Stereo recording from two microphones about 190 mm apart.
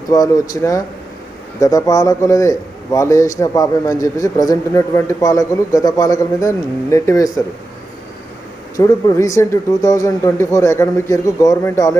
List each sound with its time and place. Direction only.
0.1 s a man's voice: 20° left (ahead or behind)
8.7 s a man's voice: 15° left (ahead or behind)